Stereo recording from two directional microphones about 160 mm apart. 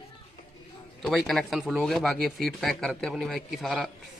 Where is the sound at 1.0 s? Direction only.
Centre (ahead or behind).